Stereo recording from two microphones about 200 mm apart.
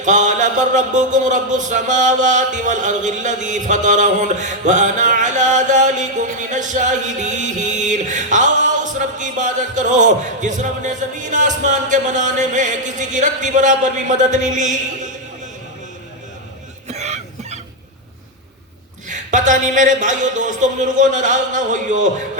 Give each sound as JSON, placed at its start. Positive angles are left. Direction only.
{"t": 0.0, "sound": "mantra", "side_deg": -40}
{"t": 16.9, "sound": "cough", "side_deg": -35}
{"t": 19.0, "sound": "mantra", "side_deg": -40}